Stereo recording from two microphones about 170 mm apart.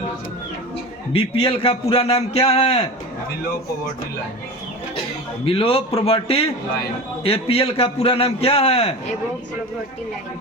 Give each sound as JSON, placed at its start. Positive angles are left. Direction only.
{"t": 1.1, "sound": "a man's voice", "side_deg": 35}
{"t": 5.5, "sound": "a man's voice", "side_deg": 35}